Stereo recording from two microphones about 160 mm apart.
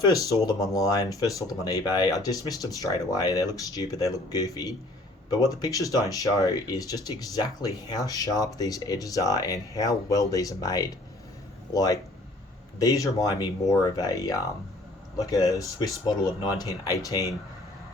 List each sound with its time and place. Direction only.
0.0 s speech: 20° left (ahead or behind)